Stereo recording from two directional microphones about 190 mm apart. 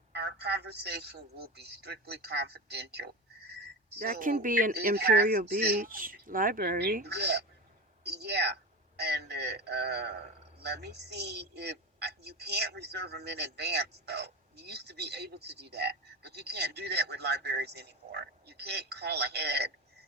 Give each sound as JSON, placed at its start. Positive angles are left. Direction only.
{"t": 1.4, "sound": "a woman's voice", "side_deg": -60}
{"t": 4.0, "sound": "a woman's voice", "side_deg": -45}